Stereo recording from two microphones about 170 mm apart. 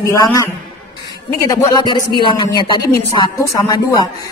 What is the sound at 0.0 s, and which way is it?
A woman's voice, 20° left (ahead or behind).